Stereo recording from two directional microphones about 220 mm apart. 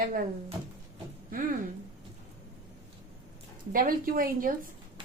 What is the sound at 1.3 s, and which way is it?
Speech, 40° right (ahead or behind).